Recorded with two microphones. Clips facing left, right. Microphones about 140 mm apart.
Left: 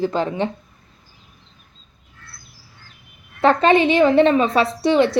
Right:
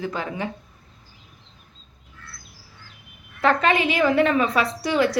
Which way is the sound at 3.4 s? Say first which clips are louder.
Left 5 dB; 30° left (ahead or behind).